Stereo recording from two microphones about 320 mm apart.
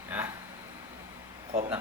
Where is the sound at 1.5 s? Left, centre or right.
Centre.